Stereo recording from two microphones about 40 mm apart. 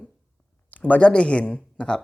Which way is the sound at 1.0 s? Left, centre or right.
Left.